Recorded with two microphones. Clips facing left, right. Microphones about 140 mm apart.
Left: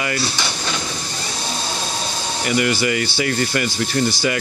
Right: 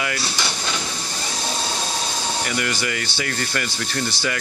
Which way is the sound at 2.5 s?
15° left (ahead or behind).